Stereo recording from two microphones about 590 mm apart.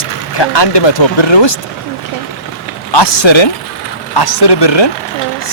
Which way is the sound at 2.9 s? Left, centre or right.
Left.